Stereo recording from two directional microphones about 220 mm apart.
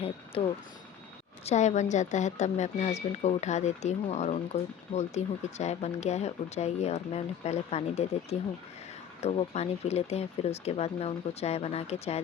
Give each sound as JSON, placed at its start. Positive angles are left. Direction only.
{"t": 0.3, "sound": "speech", "side_deg": 25}